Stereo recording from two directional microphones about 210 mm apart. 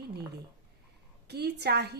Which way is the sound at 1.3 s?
50° right (ahead or behind).